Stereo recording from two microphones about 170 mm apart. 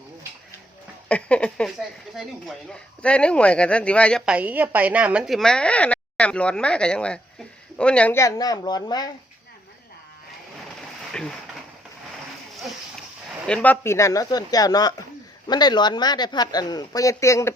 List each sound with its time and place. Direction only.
1.0 s speech: 5° left (ahead or behind)
4.3 s speech: 10° right (ahead or behind); by 9.0 s 25° left (ahead or behind)
11.1 s a sound: 5° left (ahead or behind)
13.5 s speech: 10° left (ahead or behind)